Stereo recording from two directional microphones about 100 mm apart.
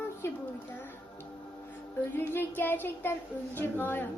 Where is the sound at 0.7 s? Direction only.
20° left (ahead or behind).